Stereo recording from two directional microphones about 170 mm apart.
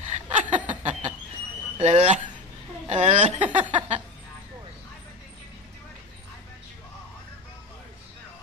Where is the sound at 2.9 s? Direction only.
45° right (ahead or behind).